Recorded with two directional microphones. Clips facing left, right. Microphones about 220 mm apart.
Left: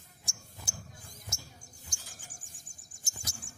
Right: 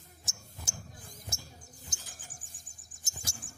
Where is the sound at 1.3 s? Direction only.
30° right (ahead or behind).